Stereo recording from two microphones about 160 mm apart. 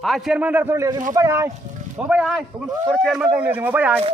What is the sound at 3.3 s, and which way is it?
Speech, 10° right (ahead or behind).